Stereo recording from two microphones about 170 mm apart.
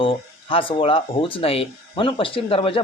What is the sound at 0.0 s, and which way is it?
Speech, 30° left (ahead or behind).